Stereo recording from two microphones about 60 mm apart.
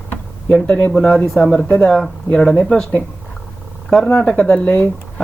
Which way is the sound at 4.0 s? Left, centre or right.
Centre.